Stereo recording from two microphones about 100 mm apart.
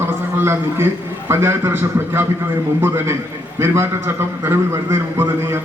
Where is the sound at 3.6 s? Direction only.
25° right (ahead or behind).